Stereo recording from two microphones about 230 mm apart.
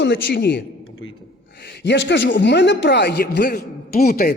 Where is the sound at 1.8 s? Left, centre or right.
Left.